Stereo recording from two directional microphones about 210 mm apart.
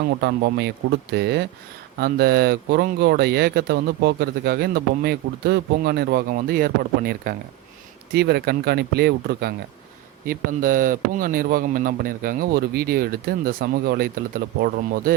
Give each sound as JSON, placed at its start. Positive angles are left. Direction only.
{"t": 0.2, "sound": "speech", "side_deg": -50}